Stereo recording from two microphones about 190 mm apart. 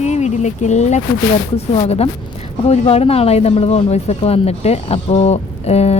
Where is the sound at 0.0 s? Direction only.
35° left (ahead or behind).